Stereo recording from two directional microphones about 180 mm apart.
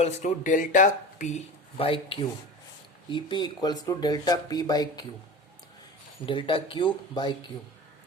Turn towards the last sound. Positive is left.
turn(degrees=25)  # may be behind; listen again after turning